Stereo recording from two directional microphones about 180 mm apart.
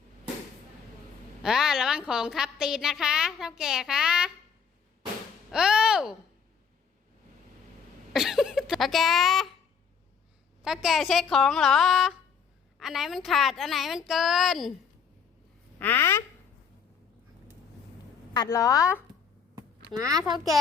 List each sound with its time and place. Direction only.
1.4 s a woman's voice: 5° right (ahead or behind)
5.5 s a sound: 5° right (ahead or behind)
8.1 s a sound: centre (ahead or behind)
10.6 s a woman's voice: centre (ahead or behind)
15.8 s speech: 10° left (ahead or behind)
18.3 s a woman's voice: 20° left (ahead or behind)
20.1 s speech: 20° right (ahead or behind)